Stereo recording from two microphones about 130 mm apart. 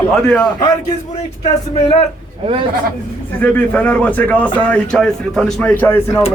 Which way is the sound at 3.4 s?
10° left (ahead or behind).